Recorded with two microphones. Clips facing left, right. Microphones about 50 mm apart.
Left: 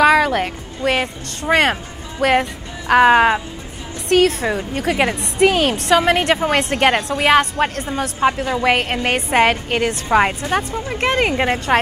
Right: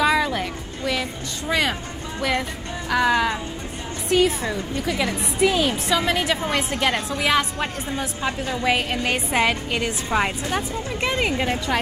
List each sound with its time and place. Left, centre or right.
0.0 s a woman's voice: left
4.4 s a woman's voice: left
10.0 s a woman's voice: left
10.5 s a woman's voice: left